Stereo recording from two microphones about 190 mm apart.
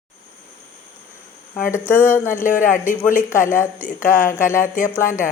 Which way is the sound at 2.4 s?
45° left (ahead or behind).